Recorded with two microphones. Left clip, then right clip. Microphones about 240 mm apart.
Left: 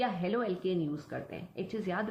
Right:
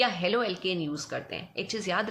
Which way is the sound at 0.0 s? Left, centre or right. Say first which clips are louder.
Right 6 dB; right.